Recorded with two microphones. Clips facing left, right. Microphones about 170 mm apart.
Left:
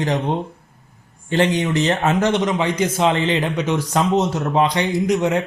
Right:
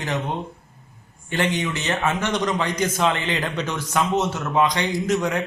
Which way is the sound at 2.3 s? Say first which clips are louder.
Left 4 dB; 20° left (ahead or behind).